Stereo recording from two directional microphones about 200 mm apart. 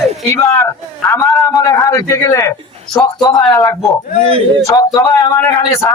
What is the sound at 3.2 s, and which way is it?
Speech, 15° left (ahead or behind).